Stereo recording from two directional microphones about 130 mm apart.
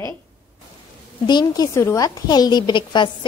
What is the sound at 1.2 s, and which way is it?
A woman's voice, 35° left (ahead or behind).